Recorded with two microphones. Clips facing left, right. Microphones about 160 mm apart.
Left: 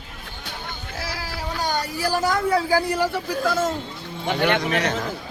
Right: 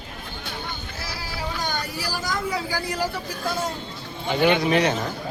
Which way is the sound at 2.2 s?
55° left (ahead or behind).